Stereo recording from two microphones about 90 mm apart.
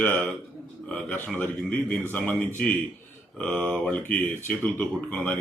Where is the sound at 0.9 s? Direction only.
10° left (ahead or behind).